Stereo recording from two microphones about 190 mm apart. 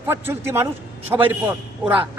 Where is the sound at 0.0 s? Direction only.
10° right (ahead or behind).